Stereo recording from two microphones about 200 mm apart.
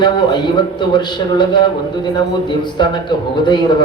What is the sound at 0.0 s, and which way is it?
A man's voice, 20° left (ahead or behind).